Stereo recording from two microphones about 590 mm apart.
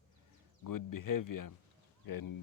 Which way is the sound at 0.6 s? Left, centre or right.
Left.